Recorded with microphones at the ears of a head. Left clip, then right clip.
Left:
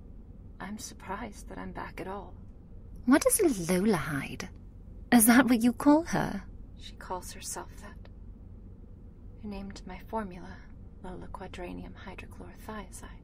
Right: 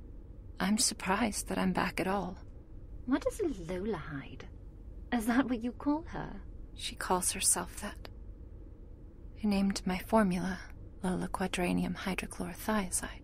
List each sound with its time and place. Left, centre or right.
0.6 s a woman's voice: right
3.1 s a woman's voice: left
6.8 s a woman's voice: right
9.4 s a woman's voice: right